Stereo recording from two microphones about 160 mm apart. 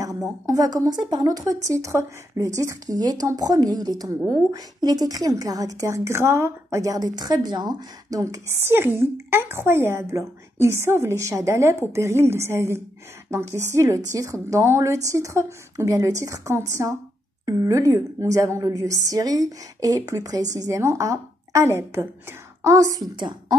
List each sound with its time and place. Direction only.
0.5 s a woman's voice: 25° right (ahead or behind)